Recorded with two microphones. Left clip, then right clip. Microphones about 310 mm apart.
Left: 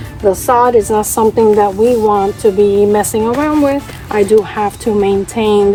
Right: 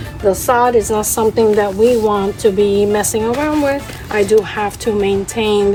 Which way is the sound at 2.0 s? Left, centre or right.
Centre.